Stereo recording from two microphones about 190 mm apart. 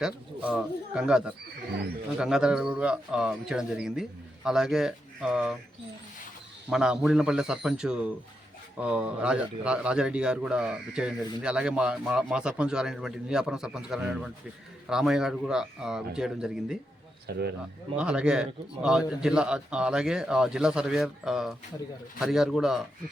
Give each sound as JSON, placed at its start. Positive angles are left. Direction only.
{"t": 0.0, "sound": "a man's voice", "side_deg": -5}
{"t": 6.7, "sound": "a man's voice", "side_deg": -5}
{"t": 17.3, "sound": "speech", "side_deg": -55}
{"t": 17.9, "sound": "a man's voice", "side_deg": -5}